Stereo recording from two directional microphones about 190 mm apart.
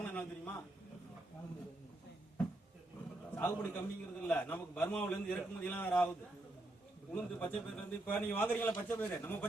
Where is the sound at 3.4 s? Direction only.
10° left (ahead or behind).